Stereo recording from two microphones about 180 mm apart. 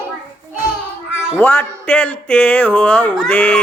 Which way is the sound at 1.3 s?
10° left (ahead or behind).